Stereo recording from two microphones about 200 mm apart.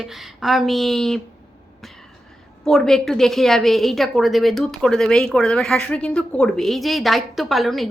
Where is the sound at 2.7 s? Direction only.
Centre (ahead or behind).